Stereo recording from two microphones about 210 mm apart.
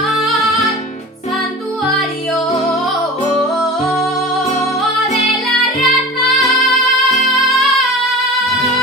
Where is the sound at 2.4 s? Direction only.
30° left (ahead or behind).